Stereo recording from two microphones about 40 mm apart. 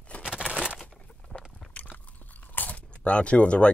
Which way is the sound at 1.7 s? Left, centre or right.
Left.